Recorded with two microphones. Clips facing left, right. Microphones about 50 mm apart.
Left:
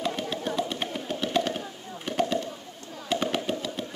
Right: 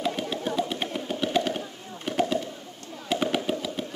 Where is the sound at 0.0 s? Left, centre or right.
Centre.